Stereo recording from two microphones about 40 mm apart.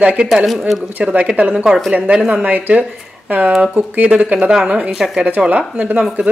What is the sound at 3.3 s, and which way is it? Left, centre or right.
A woman's voice, right.